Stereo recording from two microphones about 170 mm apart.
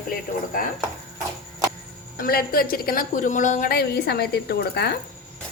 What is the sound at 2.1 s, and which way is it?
A woman's voice, 60° left (ahead or behind).